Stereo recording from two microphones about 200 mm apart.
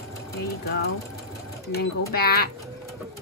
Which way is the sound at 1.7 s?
50° left (ahead or behind).